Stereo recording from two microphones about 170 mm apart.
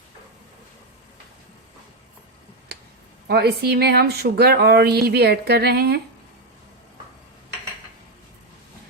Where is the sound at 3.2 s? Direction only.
70° right (ahead or behind).